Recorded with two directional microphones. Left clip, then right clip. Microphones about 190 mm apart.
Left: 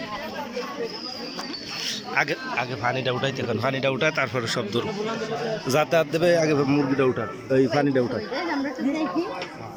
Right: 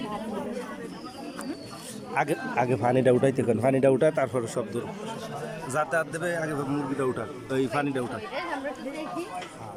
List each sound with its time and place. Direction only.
2.6 s a man's voice: 35° right (ahead or behind)
4.1 s a man's voice: 10° right (ahead or behind)
5.6 s speech: 5° left (ahead or behind)